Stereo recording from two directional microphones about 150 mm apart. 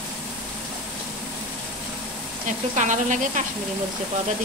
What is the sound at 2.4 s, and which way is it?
Speech, 55° right (ahead or behind).